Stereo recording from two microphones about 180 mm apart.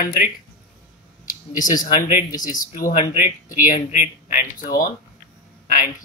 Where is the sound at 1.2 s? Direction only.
50° left (ahead or behind).